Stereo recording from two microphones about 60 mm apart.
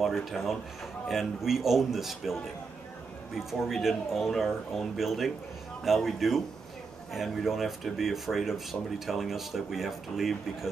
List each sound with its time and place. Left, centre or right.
0.0 s speech: centre